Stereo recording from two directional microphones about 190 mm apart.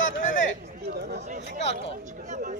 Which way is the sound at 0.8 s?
60° right (ahead or behind).